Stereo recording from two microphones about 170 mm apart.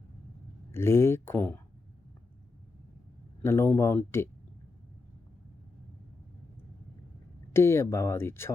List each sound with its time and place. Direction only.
0.7 s speech: 15° left (ahead or behind)
3.4 s speech: 15° left (ahead or behind)
7.5 s speech: 15° left (ahead or behind)